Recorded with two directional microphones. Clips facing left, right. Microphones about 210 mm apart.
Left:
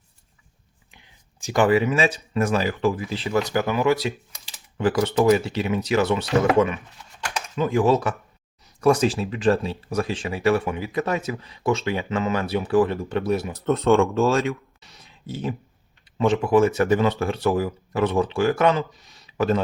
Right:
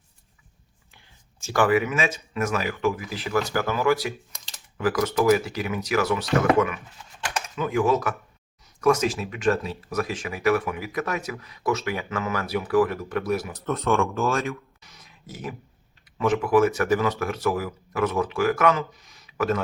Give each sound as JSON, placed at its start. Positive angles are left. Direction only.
{"t": 0.9, "sound": "speech", "side_deg": 15}